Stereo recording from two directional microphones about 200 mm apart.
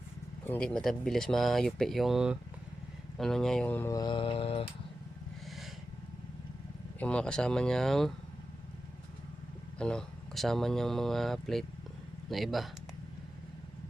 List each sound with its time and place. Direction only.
0.4 s speech: 5° left (ahead or behind); by 4.7 s 30° left (ahead or behind)
7.0 s speech: 5° left (ahead or behind)
9.7 s speech: 5° left (ahead or behind)